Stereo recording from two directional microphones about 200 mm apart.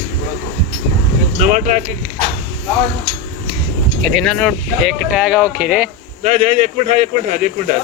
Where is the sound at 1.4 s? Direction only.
40° right (ahead or behind).